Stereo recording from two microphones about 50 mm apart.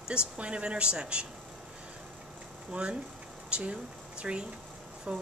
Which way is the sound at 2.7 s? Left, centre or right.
Right.